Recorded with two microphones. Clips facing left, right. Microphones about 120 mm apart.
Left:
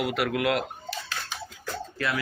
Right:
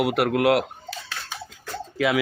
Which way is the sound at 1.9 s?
90° right.